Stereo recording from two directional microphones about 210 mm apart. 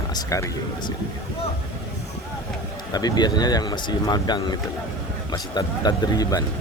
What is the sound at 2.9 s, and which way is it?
Speech, 20° left (ahead or behind).